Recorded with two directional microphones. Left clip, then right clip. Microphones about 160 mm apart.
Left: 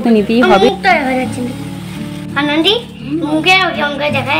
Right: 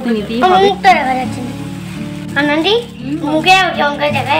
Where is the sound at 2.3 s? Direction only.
10° left (ahead or behind).